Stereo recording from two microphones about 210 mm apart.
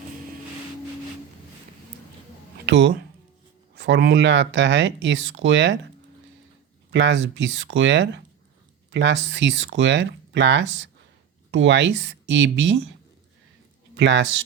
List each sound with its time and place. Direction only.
2.6 s speech: 60° right (ahead or behind)
6.9 s speech: 60° right (ahead or behind)
13.9 s speech: 55° right (ahead or behind)